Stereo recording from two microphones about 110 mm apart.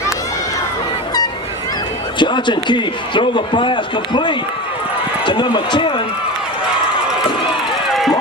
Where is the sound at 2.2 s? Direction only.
45° left (ahead or behind).